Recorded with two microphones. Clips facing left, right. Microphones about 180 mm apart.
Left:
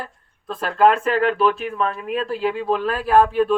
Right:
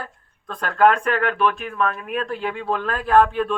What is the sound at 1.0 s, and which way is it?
Speech, 25° left (ahead or behind).